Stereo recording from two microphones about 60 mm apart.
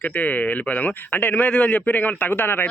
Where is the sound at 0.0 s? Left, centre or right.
Left.